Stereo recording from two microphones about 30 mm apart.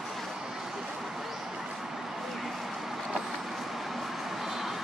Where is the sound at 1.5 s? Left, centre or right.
Centre.